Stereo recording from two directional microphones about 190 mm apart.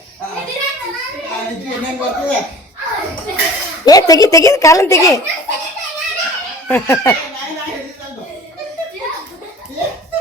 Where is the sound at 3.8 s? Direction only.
20° left (ahead or behind).